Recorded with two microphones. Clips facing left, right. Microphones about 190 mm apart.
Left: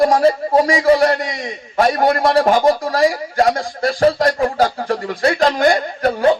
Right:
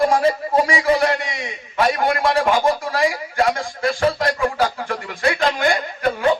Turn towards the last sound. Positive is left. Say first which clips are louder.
# left 4 dB
turn(degrees=40)  # may be behind; listen again after turning